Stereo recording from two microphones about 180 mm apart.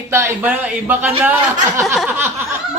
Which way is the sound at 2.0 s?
10° right (ahead or behind).